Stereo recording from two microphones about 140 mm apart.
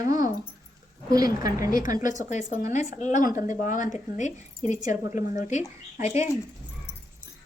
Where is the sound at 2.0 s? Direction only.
60° left (ahead or behind).